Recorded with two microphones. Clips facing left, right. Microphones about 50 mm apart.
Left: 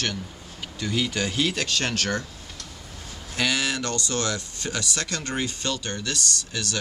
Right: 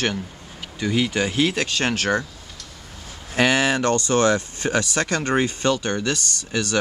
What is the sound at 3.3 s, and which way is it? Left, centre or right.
Speech, right.